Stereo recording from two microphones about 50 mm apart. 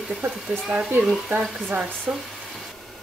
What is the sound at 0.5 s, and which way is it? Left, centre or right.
Speech, right.